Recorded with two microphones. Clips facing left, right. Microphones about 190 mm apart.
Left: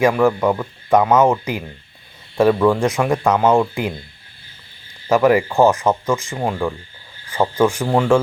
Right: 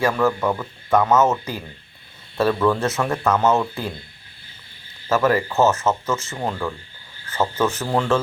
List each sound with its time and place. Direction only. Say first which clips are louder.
0.0 s speech: left 5 dB; 15° left (ahead or behind)
5.0 s speech: left 5 dB; 15° left (ahead or behind)